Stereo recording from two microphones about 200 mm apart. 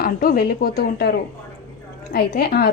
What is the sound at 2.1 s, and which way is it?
Speech, 50° left (ahead or behind).